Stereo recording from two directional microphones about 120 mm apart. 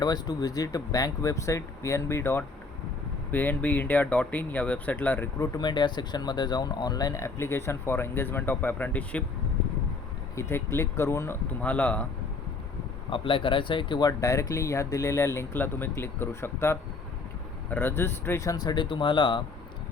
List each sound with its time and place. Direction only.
0.0 s speech: 35° left (ahead or behind); by 5.3 s 15° left (ahead or behind)
5.4 s speech: 35° left (ahead or behind); by 9.2 s 10° left (ahead or behind)
10.3 s speech: 20° left (ahead or behind)
11.6 s speech: 10° left (ahead or behind)
13.1 s speech: 45° left (ahead or behind)